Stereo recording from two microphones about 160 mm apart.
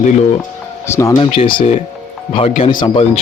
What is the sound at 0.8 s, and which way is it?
Speech, 15° left (ahead or behind).